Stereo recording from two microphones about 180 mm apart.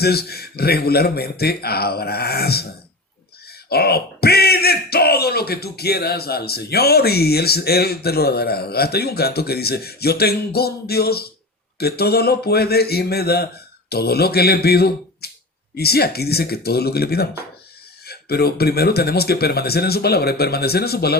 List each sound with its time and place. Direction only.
0.0 s speech: 60° left (ahead or behind)
3.7 s speech: 60° left (ahead or behind)